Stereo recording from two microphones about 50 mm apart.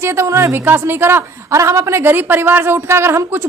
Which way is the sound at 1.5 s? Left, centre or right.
Right.